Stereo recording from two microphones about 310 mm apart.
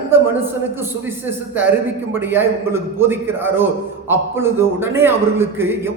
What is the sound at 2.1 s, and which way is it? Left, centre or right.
A man's voice, centre.